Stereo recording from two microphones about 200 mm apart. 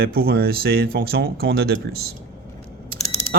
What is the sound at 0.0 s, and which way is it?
Speech, 50° right (ahead or behind).